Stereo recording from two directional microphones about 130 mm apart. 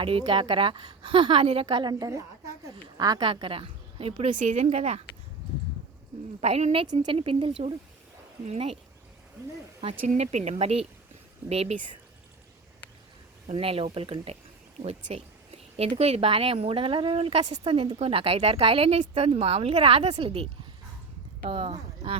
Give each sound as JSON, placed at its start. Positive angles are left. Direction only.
{"t": 0.0, "sound": "a woman's voice", "side_deg": -45}
{"t": 4.3, "sound": "speech", "side_deg": -65}
{"t": 6.4, "sound": "speech", "side_deg": -55}
{"t": 6.8, "sound": "a woman's voice", "side_deg": -35}
{"t": 7.2, "sound": "a woman's voice", "side_deg": -45}
{"t": 9.4, "sound": "speech", "side_deg": -25}
{"t": 9.8, "sound": "a woman's voice", "side_deg": -45}
{"t": 10.2, "sound": "a woman's voice", "side_deg": -55}
{"t": 13.5, "sound": "a woman's voice", "side_deg": -45}
{"t": 14.8, "sound": "a woman's voice", "side_deg": -60}